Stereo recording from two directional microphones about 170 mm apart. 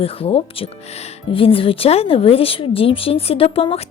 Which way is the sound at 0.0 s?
35° left (ahead or behind).